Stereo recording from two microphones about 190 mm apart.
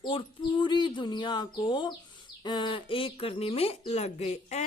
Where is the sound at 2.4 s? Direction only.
25° left (ahead or behind).